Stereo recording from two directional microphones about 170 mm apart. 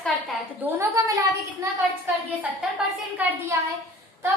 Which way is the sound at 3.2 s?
10° right (ahead or behind).